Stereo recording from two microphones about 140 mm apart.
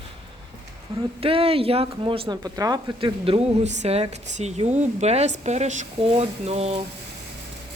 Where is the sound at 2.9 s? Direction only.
40° right (ahead or behind); by 5.8 s 55° right (ahead or behind).